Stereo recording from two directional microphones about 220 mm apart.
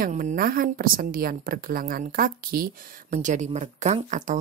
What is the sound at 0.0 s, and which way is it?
A woman's voice, 35° right (ahead or behind).